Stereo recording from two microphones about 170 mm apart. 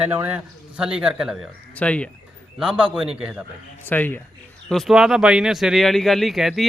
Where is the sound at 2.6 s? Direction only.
5° right (ahead or behind).